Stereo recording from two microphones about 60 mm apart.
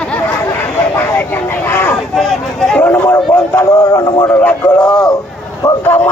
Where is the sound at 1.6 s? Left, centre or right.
Left.